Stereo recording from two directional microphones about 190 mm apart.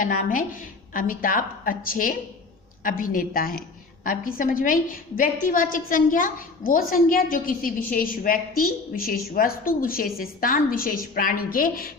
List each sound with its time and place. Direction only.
0.0 s a woman's voice: 45° left (ahead or behind)